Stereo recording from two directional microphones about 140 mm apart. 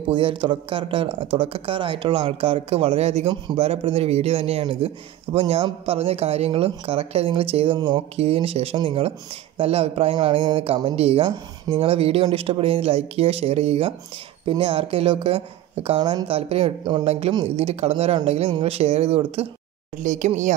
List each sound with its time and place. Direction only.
0.1 s speech: 40° right (ahead or behind)
8.2 s speech: 45° right (ahead or behind)
20.0 s speech: 60° right (ahead or behind)